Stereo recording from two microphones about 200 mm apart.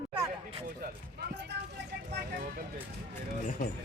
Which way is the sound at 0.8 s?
55° right (ahead or behind).